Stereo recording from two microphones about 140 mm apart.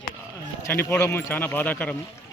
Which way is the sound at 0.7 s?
15° left (ahead or behind).